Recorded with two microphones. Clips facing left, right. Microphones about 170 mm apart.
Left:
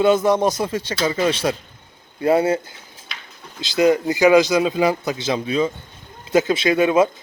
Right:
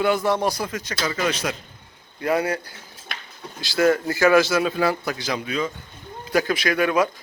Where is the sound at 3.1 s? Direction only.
50° right (ahead or behind).